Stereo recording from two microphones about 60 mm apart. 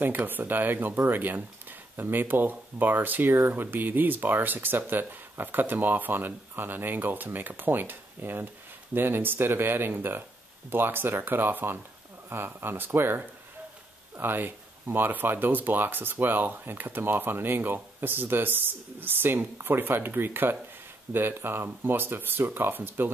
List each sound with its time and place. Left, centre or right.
0.0 s speech: right